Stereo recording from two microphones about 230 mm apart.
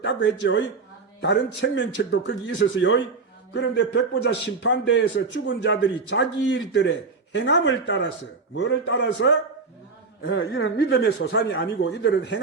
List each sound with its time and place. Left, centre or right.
0.0 s a man's voice: left